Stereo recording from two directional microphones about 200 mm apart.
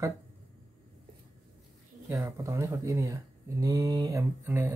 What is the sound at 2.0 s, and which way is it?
Speech, 15° right (ahead or behind).